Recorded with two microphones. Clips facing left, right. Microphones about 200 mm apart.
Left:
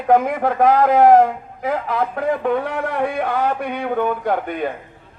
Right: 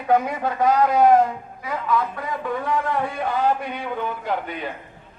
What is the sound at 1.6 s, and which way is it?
A man's voice, 55° left (ahead or behind).